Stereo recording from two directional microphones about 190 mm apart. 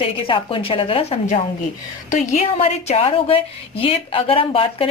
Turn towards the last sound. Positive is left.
turn(degrees=30)  # may be behind; listen again after turning